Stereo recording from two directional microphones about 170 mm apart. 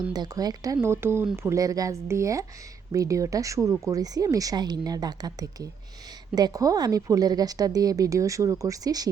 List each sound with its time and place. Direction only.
0.1 s a woman's voice: 20° right (ahead or behind)